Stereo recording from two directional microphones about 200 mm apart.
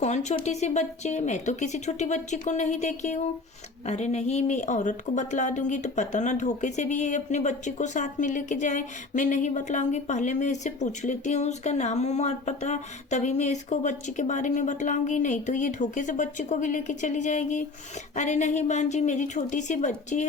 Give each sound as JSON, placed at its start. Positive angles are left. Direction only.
{"t": 0.0, "sound": "speech", "side_deg": 35}